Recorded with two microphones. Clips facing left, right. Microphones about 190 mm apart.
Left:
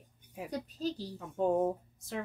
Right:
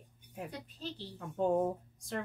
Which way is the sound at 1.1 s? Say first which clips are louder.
Even; 5° left (ahead or behind).